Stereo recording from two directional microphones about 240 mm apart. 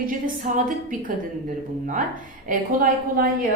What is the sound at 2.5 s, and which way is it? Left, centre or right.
Speech, right.